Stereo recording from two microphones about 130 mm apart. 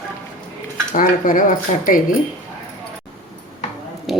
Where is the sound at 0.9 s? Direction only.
90° left.